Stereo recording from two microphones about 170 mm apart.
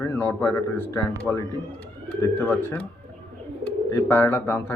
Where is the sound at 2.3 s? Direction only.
10° left (ahead or behind).